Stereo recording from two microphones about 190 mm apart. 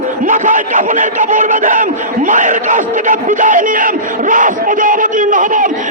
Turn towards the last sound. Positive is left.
turn(degrees=-45)  # may be behind; listen again after turning